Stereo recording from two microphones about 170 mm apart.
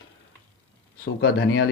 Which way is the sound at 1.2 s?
85° left.